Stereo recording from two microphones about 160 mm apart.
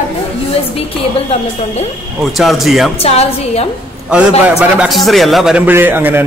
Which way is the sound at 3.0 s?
40° left (ahead or behind).